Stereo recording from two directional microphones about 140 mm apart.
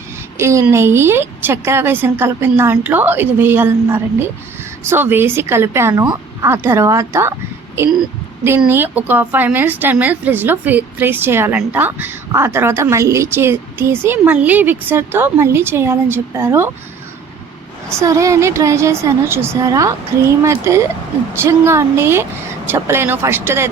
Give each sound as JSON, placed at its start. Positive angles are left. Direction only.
{"t": 0.3, "sound": "a woman's voice", "side_deg": -20}
{"t": 18.0, "sound": "a woman's voice", "side_deg": -25}